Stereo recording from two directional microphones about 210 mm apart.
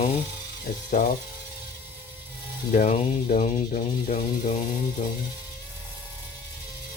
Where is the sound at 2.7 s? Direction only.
35° left (ahead or behind).